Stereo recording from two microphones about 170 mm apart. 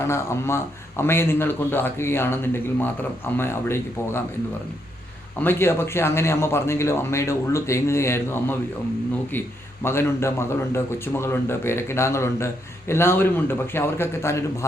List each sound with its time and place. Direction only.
0.0 s a man's voice: 15° left (ahead or behind)
5.4 s a man's voice: 15° left (ahead or behind)
9.8 s a man's voice: 15° left (ahead or behind)